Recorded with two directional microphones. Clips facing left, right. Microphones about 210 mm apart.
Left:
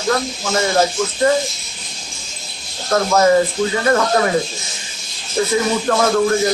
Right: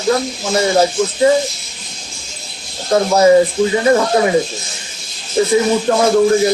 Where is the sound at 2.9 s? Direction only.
15° right (ahead or behind).